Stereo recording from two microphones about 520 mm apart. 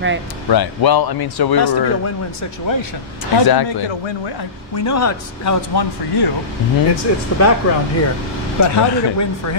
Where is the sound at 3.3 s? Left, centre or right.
Left.